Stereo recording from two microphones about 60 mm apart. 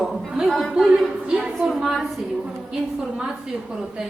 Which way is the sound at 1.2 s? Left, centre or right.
Centre.